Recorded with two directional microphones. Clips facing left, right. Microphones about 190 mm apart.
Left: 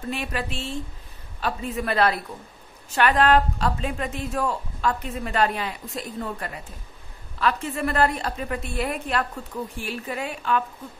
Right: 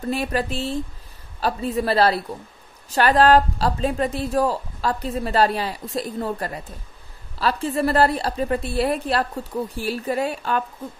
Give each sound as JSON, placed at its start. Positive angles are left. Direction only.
{"t": 0.1, "sound": "a woman's voice", "side_deg": -40}